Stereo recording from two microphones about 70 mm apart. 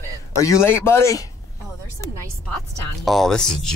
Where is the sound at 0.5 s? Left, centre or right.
Left.